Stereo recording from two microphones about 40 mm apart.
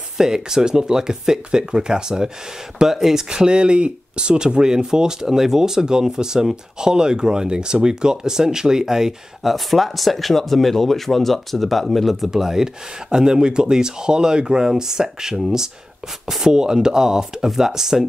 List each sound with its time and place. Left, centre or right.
0.2 s speech: centre
3.3 s speech: right